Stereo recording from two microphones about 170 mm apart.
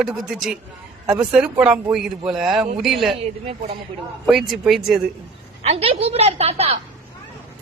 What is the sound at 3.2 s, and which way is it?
Speech, 35° right (ahead or behind).